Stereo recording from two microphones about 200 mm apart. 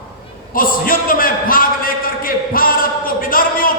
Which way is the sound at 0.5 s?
45° left (ahead or behind).